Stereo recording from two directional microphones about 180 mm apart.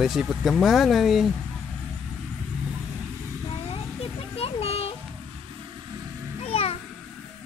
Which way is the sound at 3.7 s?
30° left (ahead or behind).